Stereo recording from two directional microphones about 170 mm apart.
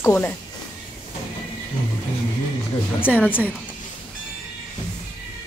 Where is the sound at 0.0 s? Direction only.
15° left (ahead or behind).